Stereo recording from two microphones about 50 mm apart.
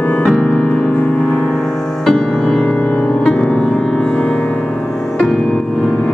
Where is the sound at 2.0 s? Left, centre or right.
Centre.